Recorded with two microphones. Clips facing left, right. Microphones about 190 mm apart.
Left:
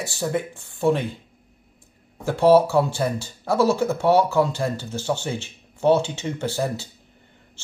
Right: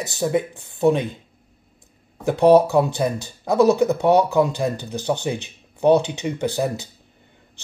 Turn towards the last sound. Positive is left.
turn(degrees=-15)  # may be behind; listen again after turning